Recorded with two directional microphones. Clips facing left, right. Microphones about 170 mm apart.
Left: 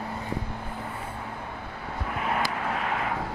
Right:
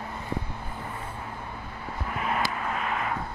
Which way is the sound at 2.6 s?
80° left.